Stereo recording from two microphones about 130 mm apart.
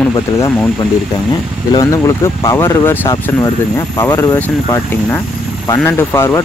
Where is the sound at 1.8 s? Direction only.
25° left (ahead or behind).